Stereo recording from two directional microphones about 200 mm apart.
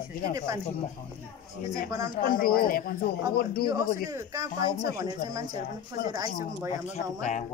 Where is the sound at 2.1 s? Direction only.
45° left (ahead or behind).